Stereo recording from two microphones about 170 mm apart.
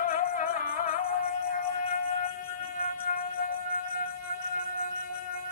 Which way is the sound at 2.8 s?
60° left (ahead or behind).